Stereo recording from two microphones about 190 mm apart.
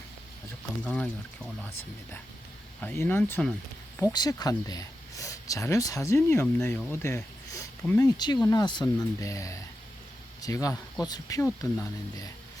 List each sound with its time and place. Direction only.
0.9 s speech: 5° left (ahead or behind)
2.8 s speech: 10° left (ahead or behind)
7.5 s a sound: 10° left (ahead or behind)
8.2 s speech: 20° left (ahead or behind)